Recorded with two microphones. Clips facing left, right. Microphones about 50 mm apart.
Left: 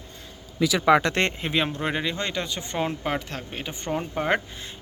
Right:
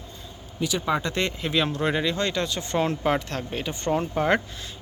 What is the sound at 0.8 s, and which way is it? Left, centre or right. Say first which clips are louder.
Speech: left 8 dB; left.